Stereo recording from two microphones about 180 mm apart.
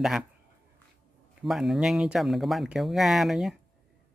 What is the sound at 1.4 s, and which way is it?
Speech, centre (ahead or behind).